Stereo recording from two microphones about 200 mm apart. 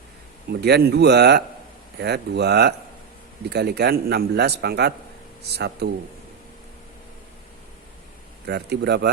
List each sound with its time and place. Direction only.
0.6 s a man's voice: 55° right (ahead or behind)
8.4 s a man's voice: 55° right (ahead or behind)